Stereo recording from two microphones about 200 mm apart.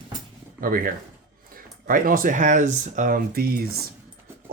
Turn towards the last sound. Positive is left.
turn(degrees=-50)  # may be behind; listen again after turning